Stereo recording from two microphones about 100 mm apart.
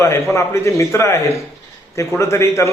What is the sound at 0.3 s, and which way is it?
A man's voice, 30° left (ahead or behind).